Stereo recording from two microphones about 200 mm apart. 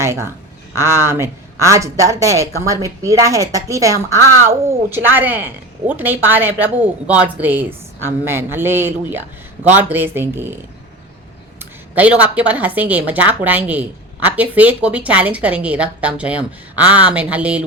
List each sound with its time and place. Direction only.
0.0 s a woman's voice: 15° right (ahead or behind)
11.6 s a woman's voice: 5° right (ahead or behind)